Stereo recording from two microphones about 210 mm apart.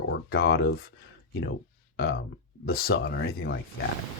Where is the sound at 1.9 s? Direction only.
50° left (ahead or behind).